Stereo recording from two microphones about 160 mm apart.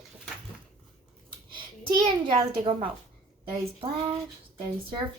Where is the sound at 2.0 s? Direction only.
35° right (ahead or behind).